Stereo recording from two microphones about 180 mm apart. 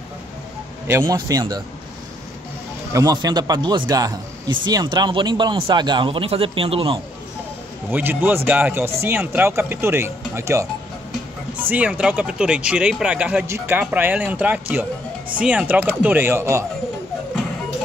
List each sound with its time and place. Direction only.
0.8 s speech: 15° right (ahead or behind)
2.9 s speech: 20° right (ahead or behind)
7.9 s speech: 10° right (ahead or behind)